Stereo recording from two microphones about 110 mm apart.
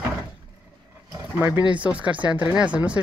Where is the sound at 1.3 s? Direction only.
25° right (ahead or behind).